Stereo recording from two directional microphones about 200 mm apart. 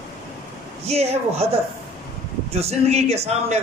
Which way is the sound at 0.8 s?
30° right (ahead or behind).